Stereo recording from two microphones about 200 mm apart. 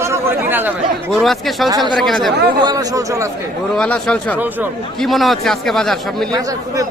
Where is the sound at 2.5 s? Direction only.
20° right (ahead or behind).